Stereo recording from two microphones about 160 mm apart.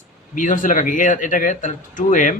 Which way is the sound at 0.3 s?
55° left (ahead or behind).